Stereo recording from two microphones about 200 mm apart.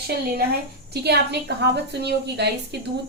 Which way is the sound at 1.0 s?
55° right (ahead or behind).